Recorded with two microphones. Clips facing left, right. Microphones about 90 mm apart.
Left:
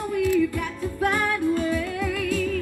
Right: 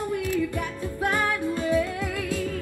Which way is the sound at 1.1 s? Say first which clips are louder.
Left 2 dB; 25° right (ahead or behind).